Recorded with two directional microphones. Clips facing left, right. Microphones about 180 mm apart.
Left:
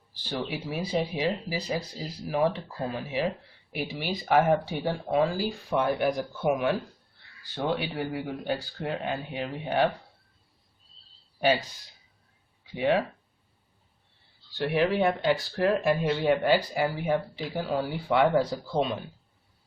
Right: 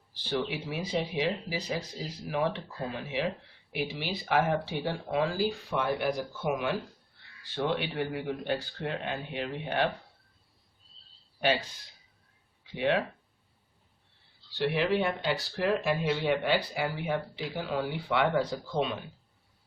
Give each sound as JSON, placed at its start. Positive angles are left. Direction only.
{"t": 0.3, "sound": "speech", "side_deg": 40}
{"t": 3.7, "sound": "speech", "side_deg": 45}
{"t": 7.5, "sound": "speech", "side_deg": 40}
{"t": 12.7, "sound": "speech", "side_deg": 40}
{"t": 14.6, "sound": "speech", "side_deg": 50}